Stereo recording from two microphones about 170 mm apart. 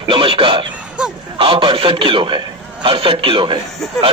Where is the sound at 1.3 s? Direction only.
30° right (ahead or behind).